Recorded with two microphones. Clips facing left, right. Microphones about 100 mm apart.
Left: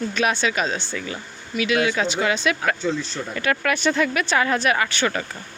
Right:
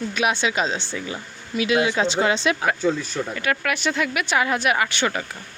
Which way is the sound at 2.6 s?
10° right (ahead or behind).